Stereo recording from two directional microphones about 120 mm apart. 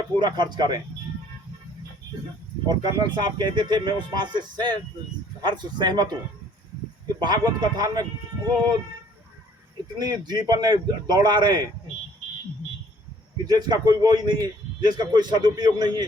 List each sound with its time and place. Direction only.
0.2 s a man's voice: 40° right (ahead or behind)
2.6 s a man's voice: 35° right (ahead or behind)
7.2 s a man's voice: 35° right (ahead or behind)
10.0 s a man's voice: 35° right (ahead or behind)
13.5 s a man's voice: 35° right (ahead or behind)